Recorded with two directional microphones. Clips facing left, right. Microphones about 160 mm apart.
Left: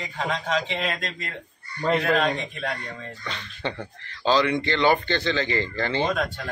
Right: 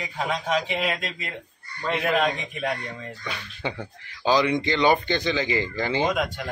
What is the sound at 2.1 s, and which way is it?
Speech, 15° right (ahead or behind).